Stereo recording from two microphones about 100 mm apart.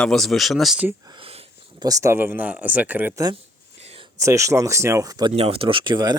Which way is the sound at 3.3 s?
80° right.